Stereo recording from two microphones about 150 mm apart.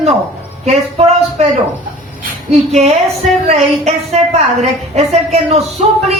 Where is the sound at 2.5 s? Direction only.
45° right (ahead or behind).